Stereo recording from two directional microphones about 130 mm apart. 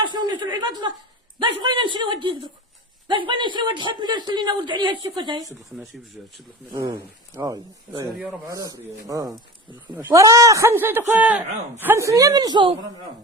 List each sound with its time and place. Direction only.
0.0 s a woman's voice: 35° right (ahead or behind)
6.2 s speech: 5° right (ahead or behind)
6.7 s a man's voice: 30° right (ahead or behind)